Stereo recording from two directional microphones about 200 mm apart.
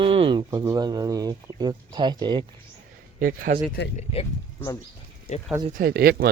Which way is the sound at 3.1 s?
45° right (ahead or behind).